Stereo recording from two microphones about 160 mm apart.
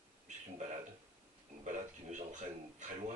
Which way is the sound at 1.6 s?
50° right (ahead or behind).